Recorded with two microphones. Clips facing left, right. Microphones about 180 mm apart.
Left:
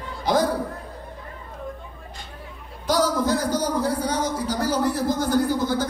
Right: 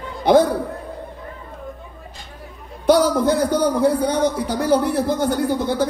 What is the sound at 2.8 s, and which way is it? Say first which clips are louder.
Speech: right 6 dB; 60° right (ahead or behind).